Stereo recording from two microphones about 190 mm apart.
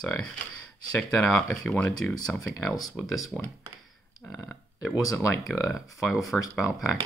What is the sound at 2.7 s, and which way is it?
Speech, 20° left (ahead or behind).